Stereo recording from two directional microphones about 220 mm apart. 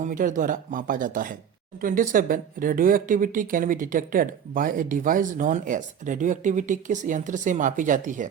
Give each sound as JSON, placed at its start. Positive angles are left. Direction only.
{"t": 0.0, "sound": "speech", "side_deg": -35}